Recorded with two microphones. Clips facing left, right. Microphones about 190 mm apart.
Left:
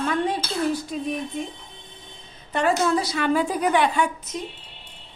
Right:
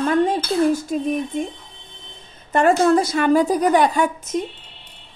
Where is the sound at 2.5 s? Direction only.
50° right (ahead or behind).